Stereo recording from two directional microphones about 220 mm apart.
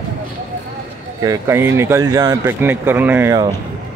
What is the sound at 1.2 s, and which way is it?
Speech, 15° right (ahead or behind).